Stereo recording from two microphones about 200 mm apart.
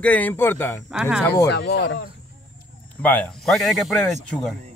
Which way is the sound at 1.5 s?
55° left (ahead or behind).